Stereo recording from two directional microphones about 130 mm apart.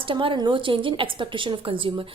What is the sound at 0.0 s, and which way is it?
A woman's voice, 40° right (ahead or behind).